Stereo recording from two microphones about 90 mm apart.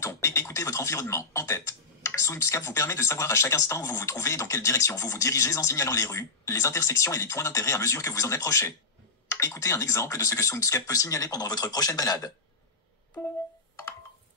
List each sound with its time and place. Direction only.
0.0 s speech: 30° left (ahead or behind)